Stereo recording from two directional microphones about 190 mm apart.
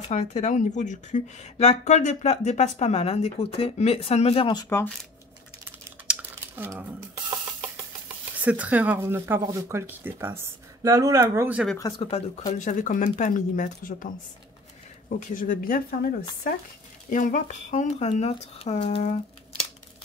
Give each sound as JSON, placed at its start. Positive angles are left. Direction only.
{"t": 0.1, "sound": "speech", "side_deg": 35}
{"t": 4.6, "sound": "speech", "side_deg": 10}
{"t": 6.0, "sound": "a sound", "side_deg": -10}
{"t": 8.4, "sound": "speech", "side_deg": -5}
{"t": 11.8, "sound": "speech", "side_deg": 25}
{"t": 12.5, "sound": "speech", "side_deg": 40}